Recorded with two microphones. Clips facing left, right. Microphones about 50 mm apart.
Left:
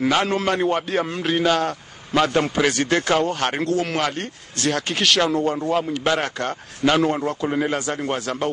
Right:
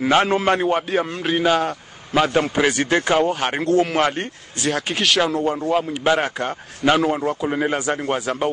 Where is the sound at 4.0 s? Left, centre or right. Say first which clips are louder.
Right 4 dB; right.